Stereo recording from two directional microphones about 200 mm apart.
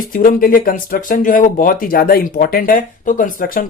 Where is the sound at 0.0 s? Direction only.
45° left (ahead or behind).